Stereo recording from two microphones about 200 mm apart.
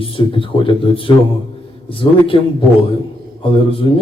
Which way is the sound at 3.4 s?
25° left (ahead or behind).